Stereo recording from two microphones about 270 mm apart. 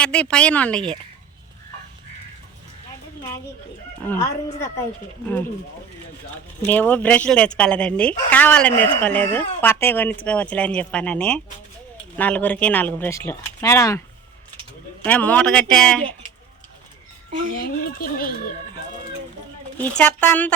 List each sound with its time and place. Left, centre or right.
0.0 s speech: centre
4.0 s speech: centre
6.7 s speech: centre
15.0 s speech: centre
17.8 s speech: left
19.8 s speech: centre